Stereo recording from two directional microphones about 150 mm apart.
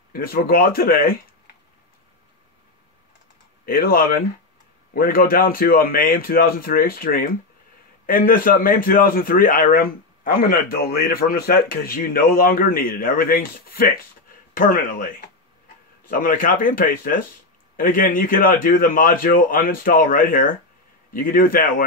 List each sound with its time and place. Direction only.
0.1 s speech: 75° left (ahead or behind)
3.6 s a man's voice: 75° left (ahead or behind)
14.5 s a man's voice: 65° left (ahead or behind)